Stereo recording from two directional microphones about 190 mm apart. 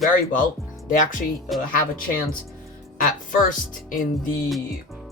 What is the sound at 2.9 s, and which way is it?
Speech, 45° left (ahead or behind).